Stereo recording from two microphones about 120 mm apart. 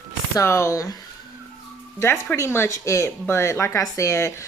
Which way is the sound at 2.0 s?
20° left (ahead or behind).